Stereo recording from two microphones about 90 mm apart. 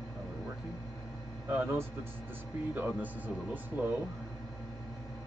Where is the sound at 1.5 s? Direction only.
20° right (ahead or behind).